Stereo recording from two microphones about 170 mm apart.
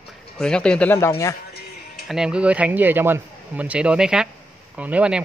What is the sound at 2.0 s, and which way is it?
Speech, 5° right (ahead or behind).